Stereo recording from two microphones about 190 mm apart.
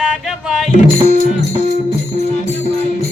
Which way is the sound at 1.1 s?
40° left (ahead or behind).